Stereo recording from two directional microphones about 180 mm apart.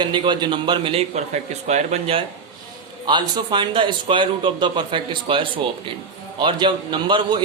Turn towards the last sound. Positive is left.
turn(degrees=-25)  # may be behind; listen again after turning